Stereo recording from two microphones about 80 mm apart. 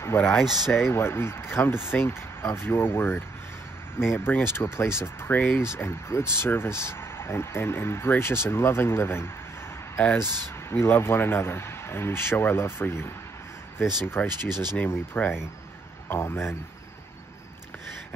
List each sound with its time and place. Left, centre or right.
0.0 s speech: left
10.7 s speech: left
14.4 s speech: right
14.8 s speech: left